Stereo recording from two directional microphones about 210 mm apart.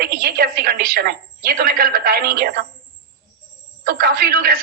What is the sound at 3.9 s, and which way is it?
Speech, 50° right (ahead or behind).